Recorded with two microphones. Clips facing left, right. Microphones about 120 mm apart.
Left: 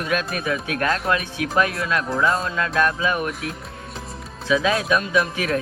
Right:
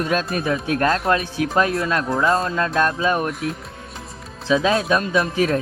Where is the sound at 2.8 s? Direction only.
30° right (ahead or behind).